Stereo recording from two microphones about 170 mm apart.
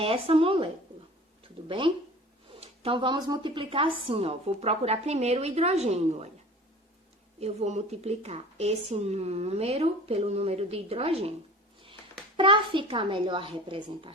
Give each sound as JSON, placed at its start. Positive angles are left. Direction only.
{"t": 0.0, "sound": "speech", "side_deg": -35}
{"t": 7.3, "sound": "speech", "side_deg": -40}
{"t": 12.4, "sound": "speech", "side_deg": -30}